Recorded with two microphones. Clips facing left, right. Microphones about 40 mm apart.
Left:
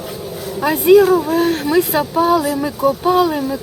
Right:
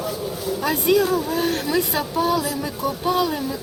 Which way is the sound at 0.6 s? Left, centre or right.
Centre.